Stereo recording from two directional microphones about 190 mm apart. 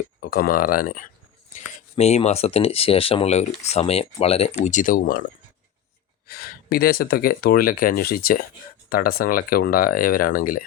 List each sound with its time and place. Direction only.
0.2 s speech: 50° left (ahead or behind)
2.0 s speech: 35° left (ahead or behind)
6.2 s speech: 55° left (ahead or behind)